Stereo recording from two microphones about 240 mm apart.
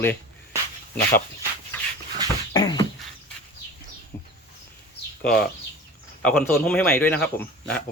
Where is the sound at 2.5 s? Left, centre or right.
Centre.